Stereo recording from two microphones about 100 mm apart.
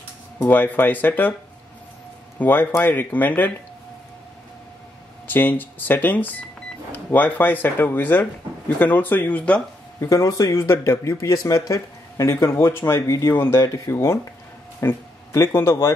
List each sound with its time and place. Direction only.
0.4 s speech: 20° left (ahead or behind)
2.3 s speech: 20° left (ahead or behind)
5.2 s speech: 20° left (ahead or behind)
9.9 s speech: 35° left (ahead or behind)